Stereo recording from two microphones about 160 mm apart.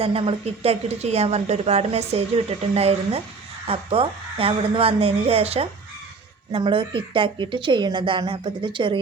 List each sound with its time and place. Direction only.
0.0 s a woman's voice: 35° right (ahead or behind)